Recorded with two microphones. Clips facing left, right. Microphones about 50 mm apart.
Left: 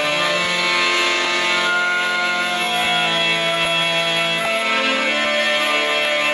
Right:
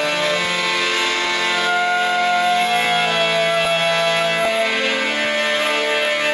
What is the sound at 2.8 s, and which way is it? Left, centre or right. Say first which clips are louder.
Music: right 1 dB; centre.